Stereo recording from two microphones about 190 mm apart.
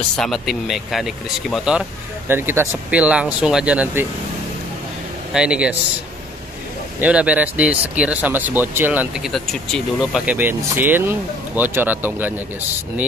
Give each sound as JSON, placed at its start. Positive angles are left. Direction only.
{"t": 0.2, "sound": "speech", "side_deg": 0}
{"t": 5.3, "sound": "speech", "side_deg": -5}
{"t": 7.0, "sound": "speech", "side_deg": -5}